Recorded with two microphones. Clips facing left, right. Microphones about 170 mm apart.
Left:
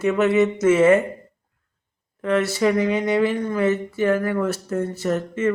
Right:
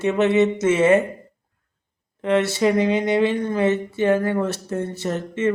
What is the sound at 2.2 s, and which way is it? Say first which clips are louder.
Speech: right 1 dB; 25° right (ahead or behind).